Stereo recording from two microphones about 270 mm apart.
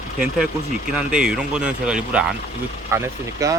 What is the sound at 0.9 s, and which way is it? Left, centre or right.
Speech, centre.